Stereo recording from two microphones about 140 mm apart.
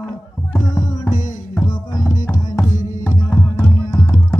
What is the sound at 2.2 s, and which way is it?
Music, 25° left (ahead or behind).